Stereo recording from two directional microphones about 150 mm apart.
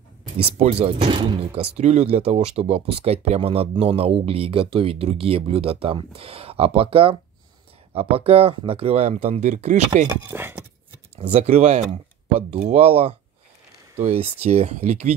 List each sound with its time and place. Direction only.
0.4 s speech: 40° right (ahead or behind)
10.3 s speech: 15° right (ahead or behind)
11.1 s speech: 45° right (ahead or behind)